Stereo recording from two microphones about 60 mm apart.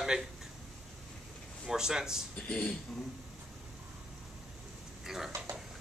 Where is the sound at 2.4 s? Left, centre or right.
Left.